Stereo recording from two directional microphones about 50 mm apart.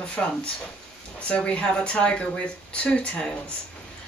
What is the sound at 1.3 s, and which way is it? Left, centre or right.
Speech, left.